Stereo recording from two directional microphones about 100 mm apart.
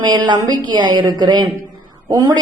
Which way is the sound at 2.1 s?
35° right (ahead or behind).